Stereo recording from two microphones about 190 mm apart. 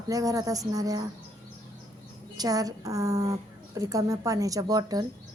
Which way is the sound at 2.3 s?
20° right (ahead or behind).